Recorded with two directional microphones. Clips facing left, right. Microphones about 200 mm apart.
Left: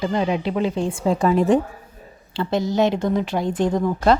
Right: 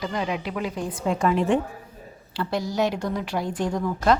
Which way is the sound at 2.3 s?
25° left (ahead or behind).